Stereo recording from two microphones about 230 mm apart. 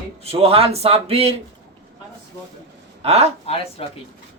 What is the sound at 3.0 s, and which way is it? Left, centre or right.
Speech, right.